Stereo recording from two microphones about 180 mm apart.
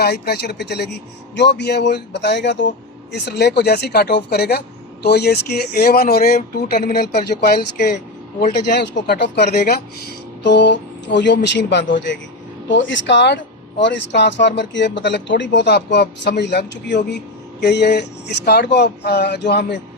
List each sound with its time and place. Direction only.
0.0 s speech: 65° left (ahead or behind)
10.4 s speech: 75° left (ahead or behind)